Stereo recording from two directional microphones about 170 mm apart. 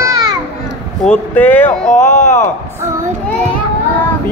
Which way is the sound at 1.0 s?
10° left (ahead or behind).